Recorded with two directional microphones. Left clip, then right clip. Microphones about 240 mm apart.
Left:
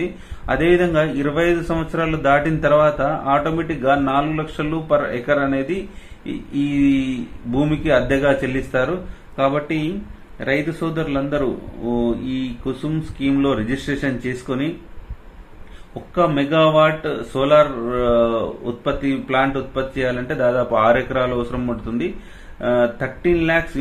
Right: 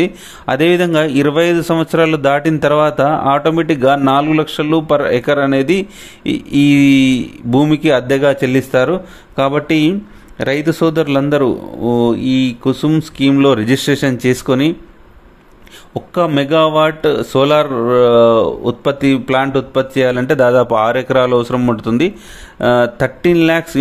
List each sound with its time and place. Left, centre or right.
0.0 s speech: right
15.9 s speech: right